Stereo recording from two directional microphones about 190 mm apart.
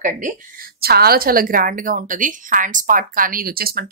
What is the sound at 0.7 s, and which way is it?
A woman's voice, 55° right (ahead or behind).